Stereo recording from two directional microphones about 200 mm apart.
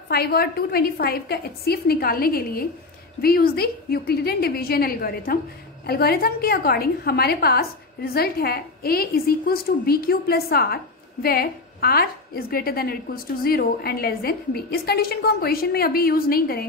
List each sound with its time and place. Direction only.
0.1 s a woman's voice: 50° left (ahead or behind)